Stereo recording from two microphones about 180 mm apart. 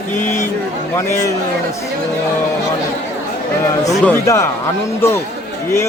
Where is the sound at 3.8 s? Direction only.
15° left (ahead or behind).